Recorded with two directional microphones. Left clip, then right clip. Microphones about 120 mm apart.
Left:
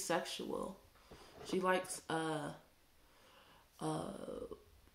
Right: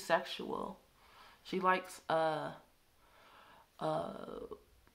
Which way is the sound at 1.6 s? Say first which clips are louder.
Right 4 dB; 20° right (ahead or behind).